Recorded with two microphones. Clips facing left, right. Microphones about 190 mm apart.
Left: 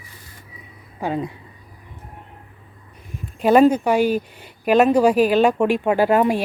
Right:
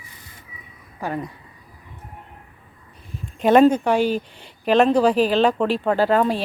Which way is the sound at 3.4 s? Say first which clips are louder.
Even; 5° left (ahead or behind).